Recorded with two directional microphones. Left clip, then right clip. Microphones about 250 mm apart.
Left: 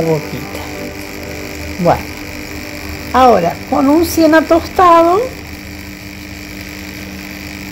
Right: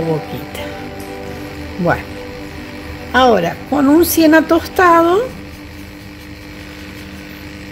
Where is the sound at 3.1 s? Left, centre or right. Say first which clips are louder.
Left 3 dB; centre.